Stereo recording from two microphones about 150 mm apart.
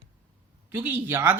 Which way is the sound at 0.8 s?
10° right (ahead or behind).